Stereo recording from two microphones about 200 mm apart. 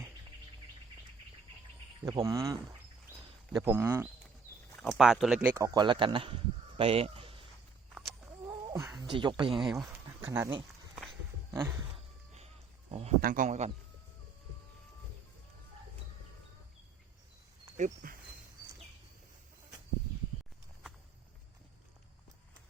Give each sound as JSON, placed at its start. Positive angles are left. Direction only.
{"t": 2.0, "sound": "speech", "side_deg": -15}
{"t": 4.8, "sound": "speech", "side_deg": 0}
{"t": 5.4, "sound": "speech", "side_deg": -15}
{"t": 8.4, "sound": "a sound", "side_deg": -15}
{"t": 9.0, "sound": "speech", "side_deg": -25}
{"t": 9.6, "sound": "a sound", "side_deg": 0}
{"t": 10.2, "sound": "a sound", "side_deg": -15}
{"t": 11.5, "sound": "speech", "side_deg": -15}
{"t": 13.2, "sound": "a man's voice", "side_deg": -40}
{"t": 17.7, "sound": "speech", "side_deg": -40}